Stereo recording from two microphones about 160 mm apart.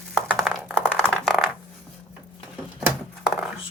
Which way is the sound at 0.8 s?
5° left (ahead or behind).